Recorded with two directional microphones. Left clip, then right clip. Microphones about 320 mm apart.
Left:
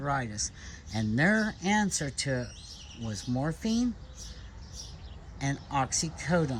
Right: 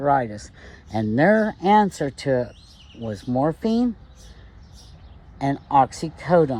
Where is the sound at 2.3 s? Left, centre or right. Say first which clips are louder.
Right 13 dB; right.